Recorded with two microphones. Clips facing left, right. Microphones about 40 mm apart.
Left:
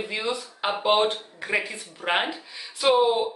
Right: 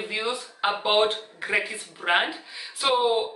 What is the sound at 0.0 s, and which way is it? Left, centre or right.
A woman's voice, centre.